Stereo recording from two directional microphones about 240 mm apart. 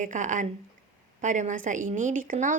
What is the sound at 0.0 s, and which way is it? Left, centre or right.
Speech, right.